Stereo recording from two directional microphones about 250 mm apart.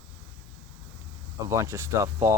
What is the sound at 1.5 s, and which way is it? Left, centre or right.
Speech, centre.